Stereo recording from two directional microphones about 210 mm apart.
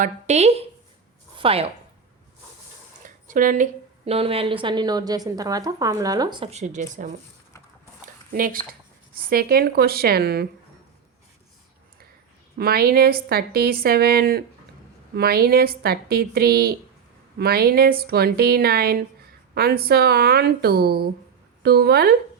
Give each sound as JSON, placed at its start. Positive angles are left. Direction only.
{"t": 0.0, "sound": "a woman's voice", "side_deg": -30}
{"t": 3.0, "sound": "a woman's voice", "side_deg": -40}
{"t": 8.0, "sound": "a sound", "side_deg": -40}
{"t": 9.3, "sound": "a woman's voice", "side_deg": -45}
{"t": 12.5, "sound": "a woman's voice", "side_deg": -45}